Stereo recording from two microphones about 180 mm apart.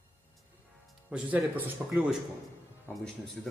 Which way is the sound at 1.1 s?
10° right (ahead or behind).